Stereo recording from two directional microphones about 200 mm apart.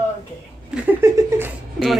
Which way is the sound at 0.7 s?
10° right (ahead or behind).